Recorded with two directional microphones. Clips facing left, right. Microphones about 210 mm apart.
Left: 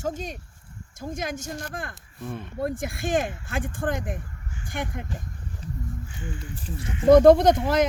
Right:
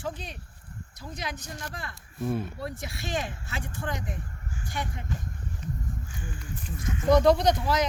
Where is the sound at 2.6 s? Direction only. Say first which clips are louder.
Left 8 dB; 50° left (ahead or behind).